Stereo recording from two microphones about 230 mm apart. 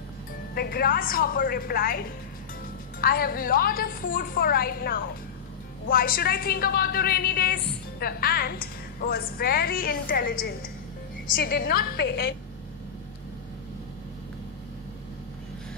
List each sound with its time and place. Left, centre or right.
0.6 s a woman's voice: left
3.0 s a woman's voice: left